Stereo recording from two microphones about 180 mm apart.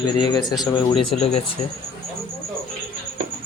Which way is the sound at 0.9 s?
35° left (ahead or behind).